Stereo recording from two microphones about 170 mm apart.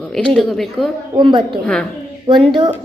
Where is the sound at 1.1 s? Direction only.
25° right (ahead or behind).